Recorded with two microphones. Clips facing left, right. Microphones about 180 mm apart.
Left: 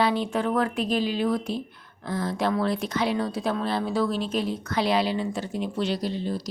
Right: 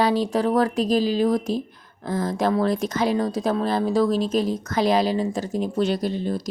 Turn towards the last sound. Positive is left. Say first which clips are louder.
# right 3 dB
turn(degrees=-50)  # may be behind; listen again after turning